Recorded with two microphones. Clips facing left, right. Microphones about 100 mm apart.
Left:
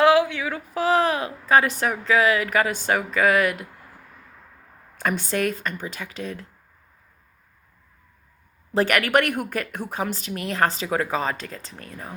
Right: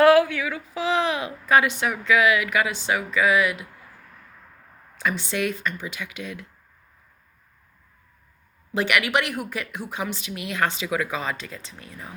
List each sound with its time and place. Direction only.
0.0 s a sound: 20° left (ahead or behind)
0.5 s speech: 45° left (ahead or behind)
4.9 s speech: 50° left (ahead or behind)
8.7 s a woman's voice: 40° left (ahead or behind)